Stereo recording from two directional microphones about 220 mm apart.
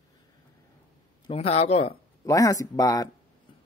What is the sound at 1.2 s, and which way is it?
Speech, 25° left (ahead or behind).